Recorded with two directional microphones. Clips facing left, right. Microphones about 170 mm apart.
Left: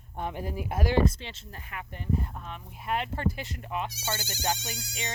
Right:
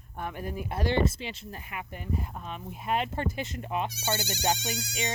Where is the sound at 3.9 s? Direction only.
70° right (ahead or behind).